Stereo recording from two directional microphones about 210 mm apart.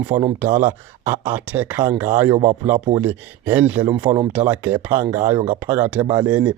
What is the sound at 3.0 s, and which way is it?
Speech, 10° right (ahead or behind).